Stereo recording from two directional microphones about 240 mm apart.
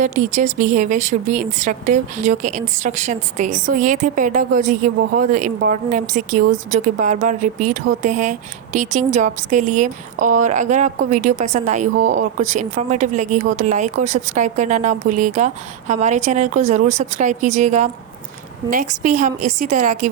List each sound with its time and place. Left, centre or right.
0.0 s a woman's voice: right